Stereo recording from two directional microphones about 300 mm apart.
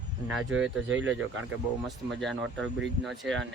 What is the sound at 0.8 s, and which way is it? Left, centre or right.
Speech, right.